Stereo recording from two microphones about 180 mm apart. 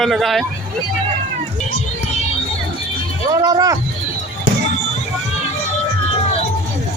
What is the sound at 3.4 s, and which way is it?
Speech, 20° right (ahead or behind).